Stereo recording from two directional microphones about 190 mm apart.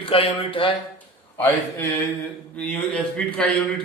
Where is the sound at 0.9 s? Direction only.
15° left (ahead or behind).